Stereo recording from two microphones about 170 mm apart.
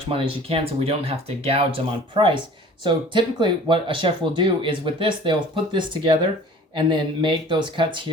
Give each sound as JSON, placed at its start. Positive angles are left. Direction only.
{"t": 0.0, "sound": "speech", "side_deg": -35}